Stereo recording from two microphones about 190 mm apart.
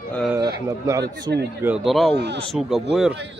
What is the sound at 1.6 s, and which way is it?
Speech, 5° right (ahead or behind).